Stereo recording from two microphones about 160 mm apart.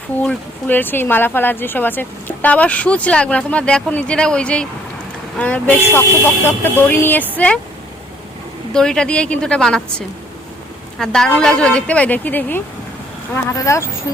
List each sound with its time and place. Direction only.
0.2 s speech: 10° left (ahead or behind)
8.7 s a woman's voice: 5° left (ahead or behind)
10.9 s speech: 5° left (ahead or behind); by 13.9 s 20° left (ahead or behind)